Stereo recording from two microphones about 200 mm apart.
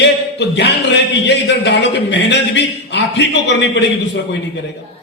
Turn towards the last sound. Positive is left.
turn(degrees=60)  # may be behind; listen again after turning